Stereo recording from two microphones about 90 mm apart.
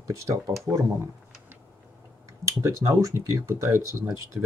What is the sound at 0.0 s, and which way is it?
Speech, 35° right (ahead or behind).